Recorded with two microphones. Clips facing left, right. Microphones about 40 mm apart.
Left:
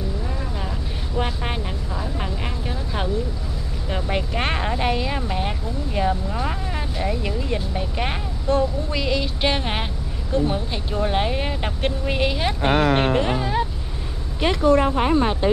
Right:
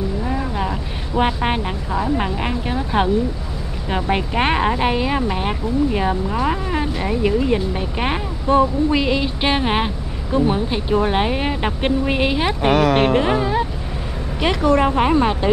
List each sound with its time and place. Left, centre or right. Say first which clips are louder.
0.3 s a woman's voice: right 7 dB; right; by 13.7 s centre
14.4 s speech: right 1 dB; right